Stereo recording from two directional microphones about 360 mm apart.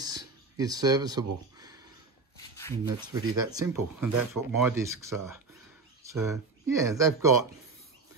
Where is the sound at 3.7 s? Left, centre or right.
Right.